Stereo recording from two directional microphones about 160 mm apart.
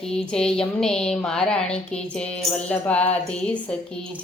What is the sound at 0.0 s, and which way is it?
Speech, 5° left (ahead or behind).